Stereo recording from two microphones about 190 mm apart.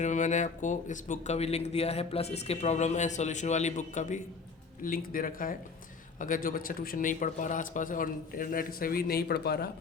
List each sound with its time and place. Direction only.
0.0 s speech: 40° left (ahead or behind); by 9.6 s 55° left (ahead or behind)